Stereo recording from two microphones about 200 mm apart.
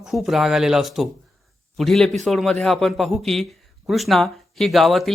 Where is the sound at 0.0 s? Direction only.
Centre (ahead or behind).